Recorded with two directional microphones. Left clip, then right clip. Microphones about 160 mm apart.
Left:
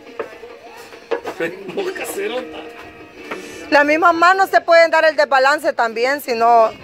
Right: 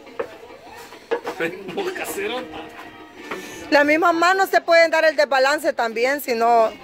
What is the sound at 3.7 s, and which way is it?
Speech, 20° right (ahead or behind).